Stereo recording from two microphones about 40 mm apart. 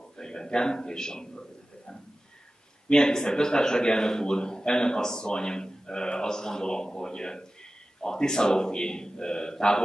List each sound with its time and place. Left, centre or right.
0.2 s a man's voice: centre
2.9 s a man's voice: centre